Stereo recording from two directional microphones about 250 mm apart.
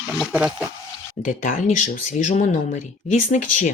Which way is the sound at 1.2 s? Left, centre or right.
Left.